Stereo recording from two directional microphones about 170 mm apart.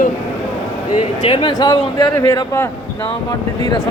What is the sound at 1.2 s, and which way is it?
Speech, 30° left (ahead or behind).